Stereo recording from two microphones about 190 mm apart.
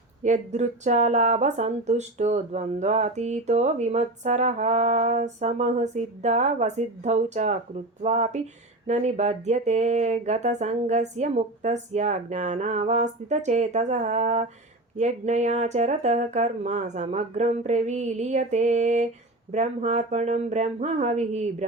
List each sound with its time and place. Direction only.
0.2 s speech: 40° right (ahead or behind)